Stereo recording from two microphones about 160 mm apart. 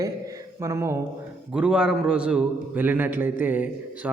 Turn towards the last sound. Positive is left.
turn(degrees=-10)  # may be behind; listen again after turning